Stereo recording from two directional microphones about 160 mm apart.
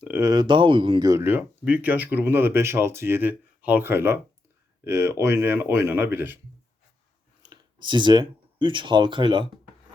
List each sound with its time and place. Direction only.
0.0 s speech: 15° right (ahead or behind)
7.4 s speech: 25° right (ahead or behind)